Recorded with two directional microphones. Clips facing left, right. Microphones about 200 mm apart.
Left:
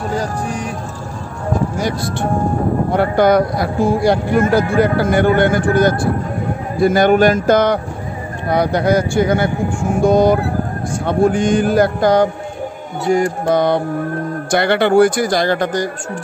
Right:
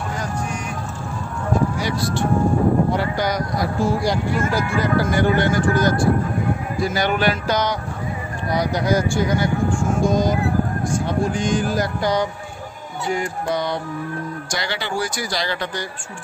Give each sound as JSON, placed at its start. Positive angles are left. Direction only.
{"t": 0.1, "sound": "music", "side_deg": 35}
{"t": 1.8, "sound": "speech", "side_deg": 50}